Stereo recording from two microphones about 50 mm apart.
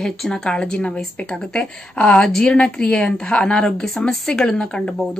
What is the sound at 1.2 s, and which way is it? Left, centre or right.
A woman's voice, centre.